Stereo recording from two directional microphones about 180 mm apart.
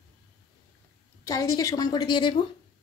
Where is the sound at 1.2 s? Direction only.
20° left (ahead or behind).